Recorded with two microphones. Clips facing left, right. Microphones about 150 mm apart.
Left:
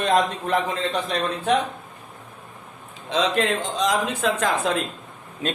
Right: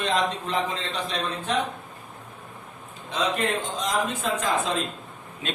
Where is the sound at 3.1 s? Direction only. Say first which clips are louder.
Left 4 dB; 90° left.